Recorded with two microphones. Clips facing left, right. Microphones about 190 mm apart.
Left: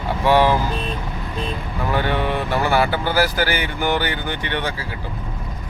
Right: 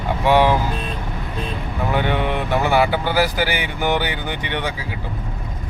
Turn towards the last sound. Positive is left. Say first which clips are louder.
# even
turn(degrees=-15)  # may be behind; listen again after turning